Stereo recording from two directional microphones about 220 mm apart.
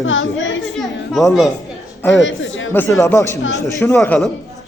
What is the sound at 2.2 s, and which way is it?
Speech, 55° left (ahead or behind).